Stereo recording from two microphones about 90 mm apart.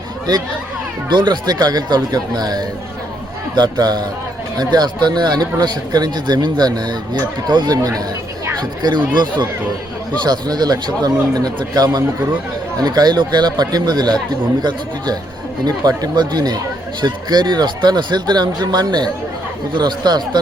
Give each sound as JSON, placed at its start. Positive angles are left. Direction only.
{"t": 1.1, "sound": "speech", "side_deg": -55}
{"t": 7.8, "sound": "speech", "side_deg": -40}
{"t": 8.8, "sound": "speech", "side_deg": -55}